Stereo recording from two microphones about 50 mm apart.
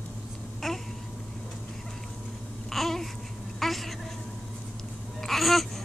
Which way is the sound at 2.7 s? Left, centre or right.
Centre.